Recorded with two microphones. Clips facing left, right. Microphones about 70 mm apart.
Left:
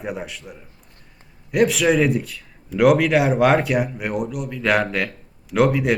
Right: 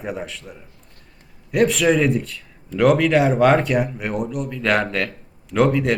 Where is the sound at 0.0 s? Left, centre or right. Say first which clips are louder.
Even; centre.